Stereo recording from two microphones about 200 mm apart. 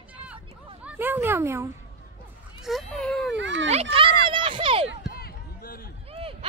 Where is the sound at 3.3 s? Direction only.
65° right (ahead or behind).